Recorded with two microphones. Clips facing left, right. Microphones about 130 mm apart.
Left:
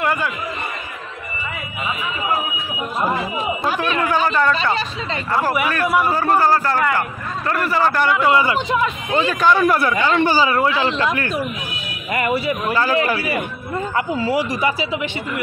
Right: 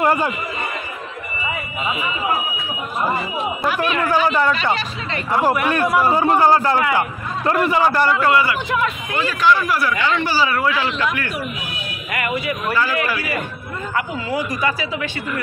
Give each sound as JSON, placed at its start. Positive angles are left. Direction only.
{"t": 0.0, "sound": "a man's voice", "side_deg": -35}
{"t": 4.1, "sound": "a man's voice", "side_deg": -10}
{"t": 6.2, "sound": "a man's voice", "side_deg": -15}
{"t": 8.3, "sound": "a man's voice", "side_deg": 20}
{"t": 9.4, "sound": "a man's voice", "side_deg": 50}
{"t": 9.9, "sound": "speech", "side_deg": 40}
{"t": 10.5, "sound": "a man's voice", "side_deg": 25}